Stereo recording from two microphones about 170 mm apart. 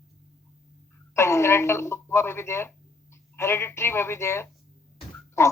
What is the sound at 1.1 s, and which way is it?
Speech, 15° left (ahead or behind).